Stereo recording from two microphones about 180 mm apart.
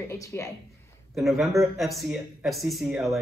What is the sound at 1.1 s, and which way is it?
Speech, centre (ahead or behind).